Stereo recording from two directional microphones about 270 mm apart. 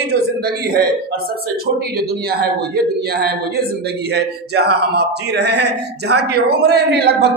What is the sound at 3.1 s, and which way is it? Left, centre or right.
Speech, right.